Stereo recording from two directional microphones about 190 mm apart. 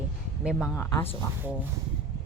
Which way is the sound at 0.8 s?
15° left (ahead or behind).